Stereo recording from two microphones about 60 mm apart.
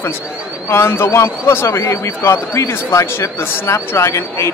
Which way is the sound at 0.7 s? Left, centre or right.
Left.